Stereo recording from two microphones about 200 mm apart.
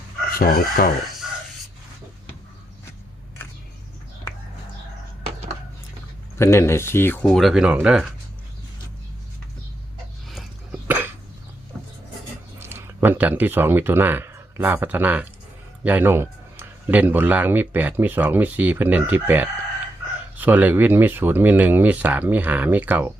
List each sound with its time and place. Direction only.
0.3 s speech: 45° left (ahead or behind)
6.4 s speech: 15° left (ahead or behind); by 8.1 s 5° right (ahead or behind)
10.2 s a sound: 5° right (ahead or behind)
12.5 s a man's voice: 10° right (ahead or behind)